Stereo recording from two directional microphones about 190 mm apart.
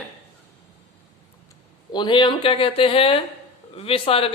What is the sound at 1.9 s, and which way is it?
A man's voice, 25° left (ahead or behind).